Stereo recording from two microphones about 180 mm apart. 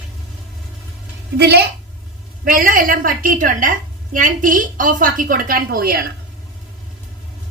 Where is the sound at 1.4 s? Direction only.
65° right (ahead or behind).